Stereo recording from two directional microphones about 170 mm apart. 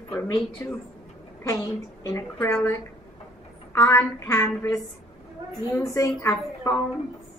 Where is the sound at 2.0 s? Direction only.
20° left (ahead or behind).